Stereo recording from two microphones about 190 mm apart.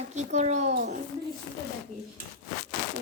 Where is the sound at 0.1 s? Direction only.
40° right (ahead or behind).